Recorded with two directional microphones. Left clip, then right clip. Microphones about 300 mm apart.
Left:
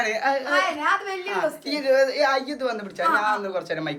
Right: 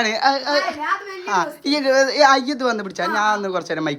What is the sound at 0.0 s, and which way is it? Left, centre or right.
A woman's voice, centre.